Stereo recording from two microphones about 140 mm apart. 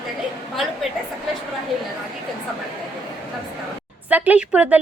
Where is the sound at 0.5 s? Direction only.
Centre (ahead or behind).